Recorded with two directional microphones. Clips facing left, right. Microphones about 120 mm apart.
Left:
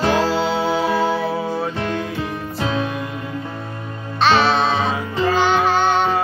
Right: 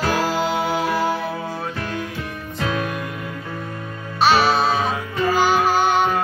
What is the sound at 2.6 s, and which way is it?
Music, 30° left (ahead or behind).